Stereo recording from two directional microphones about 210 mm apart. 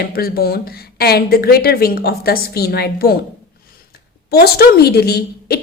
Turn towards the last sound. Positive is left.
turn(degrees=50)  # may be behind; listen again after turning